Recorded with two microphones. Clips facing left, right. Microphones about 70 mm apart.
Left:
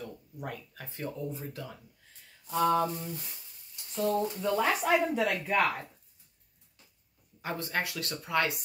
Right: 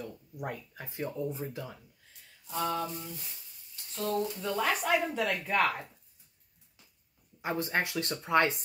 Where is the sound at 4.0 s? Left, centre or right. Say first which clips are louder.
Left 3 dB; left.